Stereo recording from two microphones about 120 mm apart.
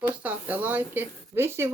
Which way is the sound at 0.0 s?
15° right (ahead or behind).